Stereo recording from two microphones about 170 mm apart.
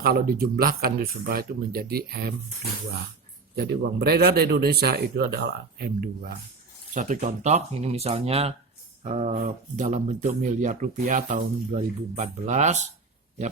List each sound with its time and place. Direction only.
0.0 s speech: 60° right (ahead or behind)
3.5 s speech: 70° right (ahead or behind)
6.9 s speech: 50° right (ahead or behind)